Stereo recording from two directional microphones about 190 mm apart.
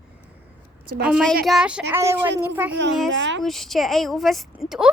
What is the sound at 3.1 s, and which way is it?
Speech, 75° right (ahead or behind).